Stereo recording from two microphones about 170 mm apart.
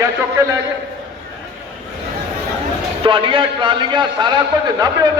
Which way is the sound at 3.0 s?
30° right (ahead or behind).